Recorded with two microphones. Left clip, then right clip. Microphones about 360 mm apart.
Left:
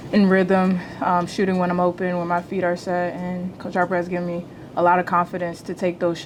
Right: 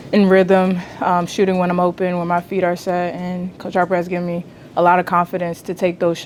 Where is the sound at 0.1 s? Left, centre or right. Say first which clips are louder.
Right 5 dB; right.